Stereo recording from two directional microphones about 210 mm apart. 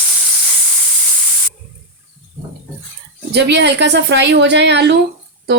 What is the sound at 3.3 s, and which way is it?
A woman's voice, 55° right (ahead or behind).